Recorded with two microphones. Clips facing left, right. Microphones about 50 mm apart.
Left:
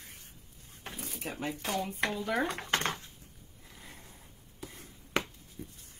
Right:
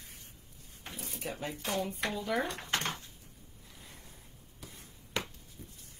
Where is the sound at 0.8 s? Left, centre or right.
Left.